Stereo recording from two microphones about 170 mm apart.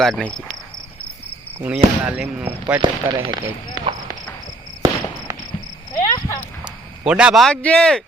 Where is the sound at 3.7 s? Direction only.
20° right (ahead or behind).